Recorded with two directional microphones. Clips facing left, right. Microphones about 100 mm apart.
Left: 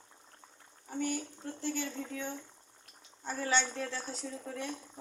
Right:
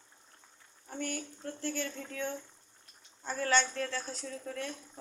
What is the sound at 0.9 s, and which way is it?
A woman's voice, 10° left (ahead or behind).